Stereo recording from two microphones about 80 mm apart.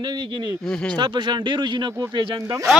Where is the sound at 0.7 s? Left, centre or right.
Centre.